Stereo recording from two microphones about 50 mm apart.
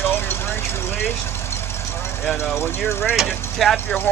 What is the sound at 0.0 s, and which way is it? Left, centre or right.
Vehicle, left.